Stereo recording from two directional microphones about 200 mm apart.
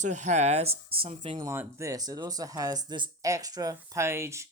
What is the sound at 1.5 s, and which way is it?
Speech, 15° right (ahead or behind).